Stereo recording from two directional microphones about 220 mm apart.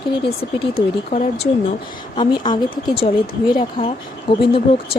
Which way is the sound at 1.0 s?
30° left (ahead or behind).